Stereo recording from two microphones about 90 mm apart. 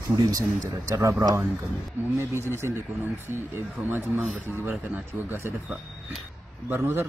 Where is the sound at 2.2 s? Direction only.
30° right (ahead or behind).